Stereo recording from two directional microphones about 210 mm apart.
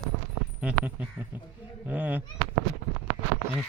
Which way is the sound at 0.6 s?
5° right (ahead or behind).